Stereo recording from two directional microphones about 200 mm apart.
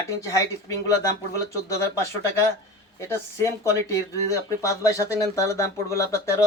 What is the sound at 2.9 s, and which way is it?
Speech, 15° left (ahead or behind).